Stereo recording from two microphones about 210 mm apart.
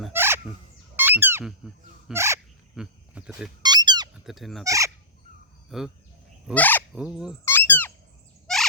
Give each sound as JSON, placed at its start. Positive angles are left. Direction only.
{"t": 0.1, "sound": "chicken", "side_deg": -10}
{"t": 0.9, "sound": "a sound", "side_deg": -10}
{"t": 2.1, "sound": "fowl", "side_deg": -15}
{"t": 2.7, "sound": "speech", "side_deg": -5}
{"t": 3.6, "sound": "a sound", "side_deg": -20}
{"t": 4.1, "sound": "speech", "side_deg": 0}
{"t": 4.6, "sound": "fowl", "side_deg": -15}
{"t": 5.7, "sound": "speech", "side_deg": 0}
{"t": 6.5, "sound": "fowl", "side_deg": 10}
{"t": 6.9, "sound": "speech", "side_deg": -5}
{"t": 7.4, "sound": "speech", "side_deg": 10}
{"t": 8.5, "sound": "fowl", "side_deg": 0}